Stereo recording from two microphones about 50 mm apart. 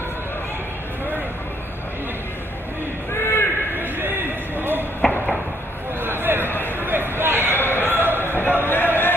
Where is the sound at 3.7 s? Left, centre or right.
Right.